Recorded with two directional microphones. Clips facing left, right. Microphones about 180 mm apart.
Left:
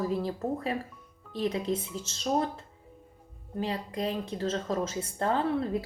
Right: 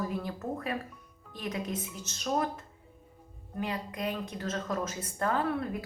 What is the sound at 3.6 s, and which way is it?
A woman's voice, 30° left (ahead or behind).